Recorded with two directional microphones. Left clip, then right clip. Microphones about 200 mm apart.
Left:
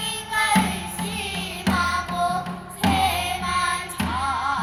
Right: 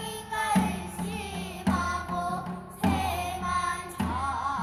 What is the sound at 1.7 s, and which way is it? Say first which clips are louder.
Carnatic music: left 6 dB; 10° left (ahead or behind).